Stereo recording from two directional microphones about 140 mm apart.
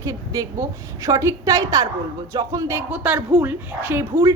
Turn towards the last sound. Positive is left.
turn(degrees=-20)  # may be behind; listen again after turning